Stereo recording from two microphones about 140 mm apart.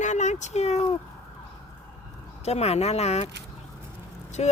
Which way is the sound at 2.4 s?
50° left (ahead or behind).